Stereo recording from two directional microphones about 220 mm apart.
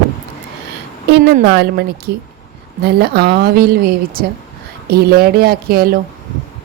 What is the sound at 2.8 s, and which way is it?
A woman's voice, 45° right (ahead or behind).